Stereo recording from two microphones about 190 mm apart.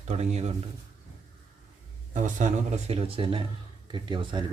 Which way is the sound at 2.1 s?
40° right (ahead or behind).